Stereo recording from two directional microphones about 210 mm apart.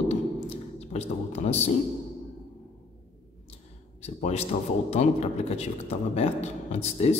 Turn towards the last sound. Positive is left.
turn(degrees=30)  # may be behind; listen again after turning